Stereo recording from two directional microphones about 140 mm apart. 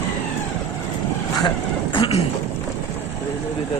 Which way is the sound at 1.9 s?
35° left (ahead or behind).